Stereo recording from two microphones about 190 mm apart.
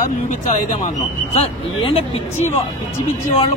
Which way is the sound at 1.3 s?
30° left (ahead or behind).